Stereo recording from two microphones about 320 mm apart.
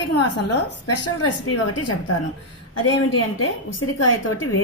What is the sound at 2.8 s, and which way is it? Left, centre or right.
A woman's voice, left.